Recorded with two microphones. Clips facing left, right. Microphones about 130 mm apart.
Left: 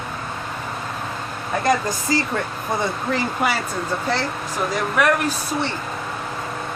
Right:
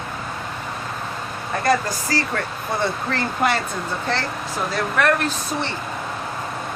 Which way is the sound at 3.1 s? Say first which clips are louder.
Even; 10° left (ahead or behind).